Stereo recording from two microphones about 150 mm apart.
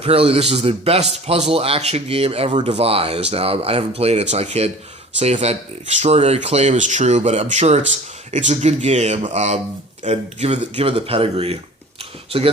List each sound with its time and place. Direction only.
0.0 s a man's voice: 40° right (ahead or behind)